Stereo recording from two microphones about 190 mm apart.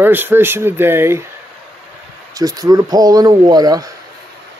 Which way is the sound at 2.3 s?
20° right (ahead or behind).